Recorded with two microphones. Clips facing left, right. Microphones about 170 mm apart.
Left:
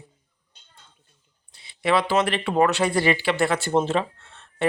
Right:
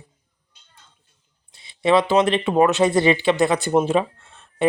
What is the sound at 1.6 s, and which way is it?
Speech, 25° right (ahead or behind).